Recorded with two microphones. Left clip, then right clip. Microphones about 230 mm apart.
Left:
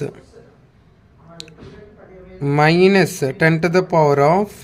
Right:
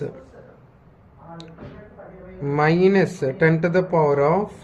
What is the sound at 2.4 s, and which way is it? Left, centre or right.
Speech, left.